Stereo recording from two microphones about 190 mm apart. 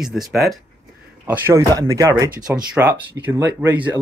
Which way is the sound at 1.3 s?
15° right (ahead or behind).